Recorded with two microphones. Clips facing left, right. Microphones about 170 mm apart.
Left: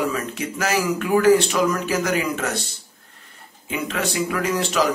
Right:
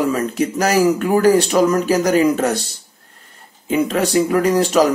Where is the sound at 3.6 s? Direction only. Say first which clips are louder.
Right 8 dB; 40° right (ahead or behind).